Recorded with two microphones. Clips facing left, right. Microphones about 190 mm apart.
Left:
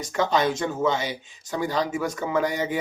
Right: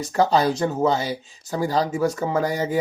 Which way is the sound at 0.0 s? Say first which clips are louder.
Right 4 dB; 35° right (ahead or behind).